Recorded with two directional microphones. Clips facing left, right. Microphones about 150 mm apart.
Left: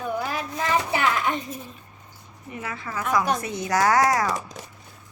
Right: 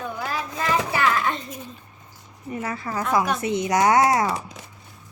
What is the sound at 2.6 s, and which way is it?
Speech, 40° right (ahead or behind).